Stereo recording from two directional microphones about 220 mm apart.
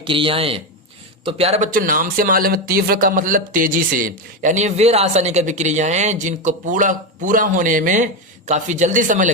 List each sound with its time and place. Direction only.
0.0 s speech: 25° right (ahead or behind)